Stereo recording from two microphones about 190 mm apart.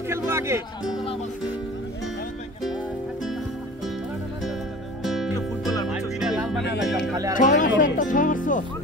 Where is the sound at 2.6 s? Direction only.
Centre (ahead or behind).